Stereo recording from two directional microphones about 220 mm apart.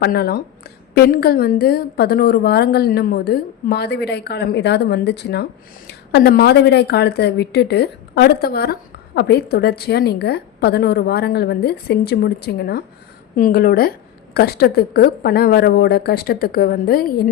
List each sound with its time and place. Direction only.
0.0 s a woman's voice: 45° left (ahead or behind)